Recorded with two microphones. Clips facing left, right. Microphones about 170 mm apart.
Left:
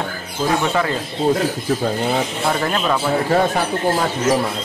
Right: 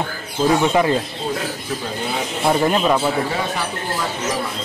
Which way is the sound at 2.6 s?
15° right (ahead or behind).